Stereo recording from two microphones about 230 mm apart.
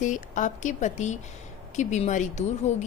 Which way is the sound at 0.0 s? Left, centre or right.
Left.